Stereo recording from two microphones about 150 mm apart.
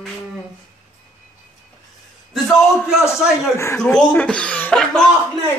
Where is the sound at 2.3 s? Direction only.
Centre (ahead or behind).